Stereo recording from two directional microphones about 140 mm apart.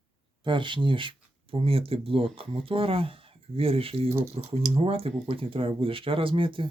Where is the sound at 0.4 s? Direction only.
35° right (ahead or behind).